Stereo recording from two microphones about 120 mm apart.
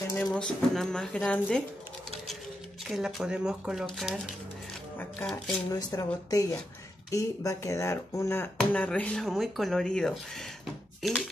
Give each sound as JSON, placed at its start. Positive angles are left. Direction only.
{"t": 0.1, "sound": "speech", "side_deg": 10}
{"t": 2.9, "sound": "speech", "side_deg": 0}
{"t": 5.7, "sound": "speech", "side_deg": 30}
{"t": 8.5, "sound": "speech", "side_deg": 10}